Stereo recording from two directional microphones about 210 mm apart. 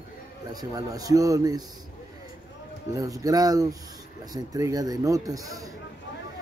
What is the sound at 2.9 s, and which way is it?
Speech, 15° right (ahead or behind).